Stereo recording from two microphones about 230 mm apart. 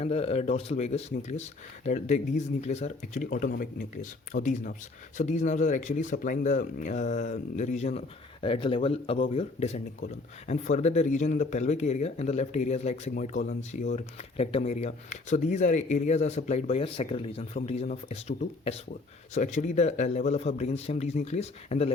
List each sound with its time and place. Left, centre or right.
0.0 s speech: left